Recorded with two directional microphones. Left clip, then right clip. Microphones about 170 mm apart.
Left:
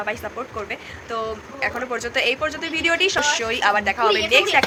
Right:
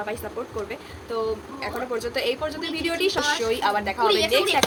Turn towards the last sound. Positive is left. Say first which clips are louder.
# left 3 dB
turn(degrees=-5)  # may be behind; listen again after turning